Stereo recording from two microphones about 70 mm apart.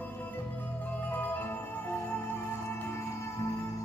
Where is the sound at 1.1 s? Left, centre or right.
Left.